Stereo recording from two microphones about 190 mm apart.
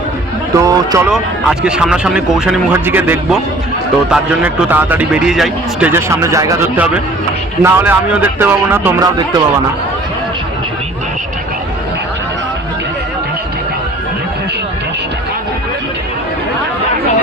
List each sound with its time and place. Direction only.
0.5 s a man's voice: 15° right (ahead or behind)
1.1 s a man's voice: 5° right (ahead or behind)
5.9 s a man's voice: 15° right (ahead or behind)